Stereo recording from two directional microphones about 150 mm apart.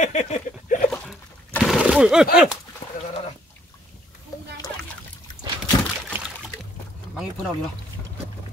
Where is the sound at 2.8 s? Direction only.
50° left (ahead or behind).